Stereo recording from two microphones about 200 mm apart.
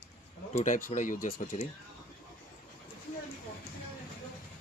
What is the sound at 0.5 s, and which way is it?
Speech, 40° left (ahead or behind).